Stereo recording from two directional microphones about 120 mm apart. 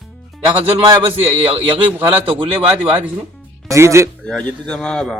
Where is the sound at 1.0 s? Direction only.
50° right (ahead or behind).